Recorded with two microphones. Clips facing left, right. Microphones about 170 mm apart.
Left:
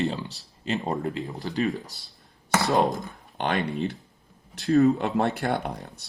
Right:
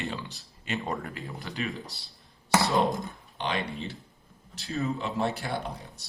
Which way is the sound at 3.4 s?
55° left (ahead or behind).